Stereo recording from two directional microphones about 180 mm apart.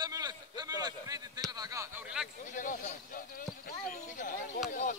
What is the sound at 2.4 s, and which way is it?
Speech, 45° left (ahead or behind).